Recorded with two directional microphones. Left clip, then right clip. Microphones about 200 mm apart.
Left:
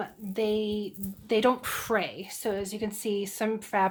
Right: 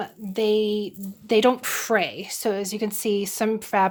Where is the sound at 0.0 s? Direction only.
35° right (ahead or behind).